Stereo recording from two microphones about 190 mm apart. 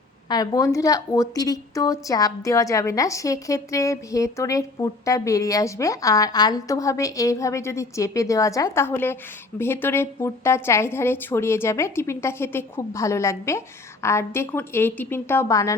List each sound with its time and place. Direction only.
0.3 s a woman's voice: 20° left (ahead or behind)